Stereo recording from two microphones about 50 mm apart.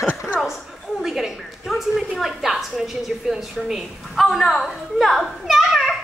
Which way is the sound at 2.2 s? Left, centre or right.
Centre.